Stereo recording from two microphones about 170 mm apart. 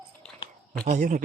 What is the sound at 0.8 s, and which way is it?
Speech, 45° right (ahead or behind).